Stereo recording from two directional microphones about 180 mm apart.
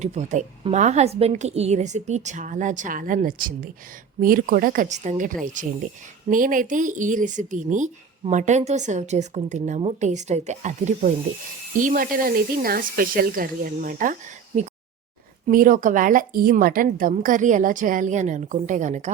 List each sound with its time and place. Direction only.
0.0 s a woman's voice: 40° right (ahead or behind)